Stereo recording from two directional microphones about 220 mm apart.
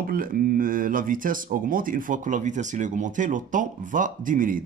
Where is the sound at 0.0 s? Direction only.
40° right (ahead or behind).